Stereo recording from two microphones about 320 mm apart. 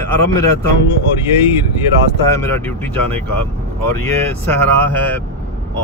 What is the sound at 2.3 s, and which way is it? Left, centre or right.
Speech, centre.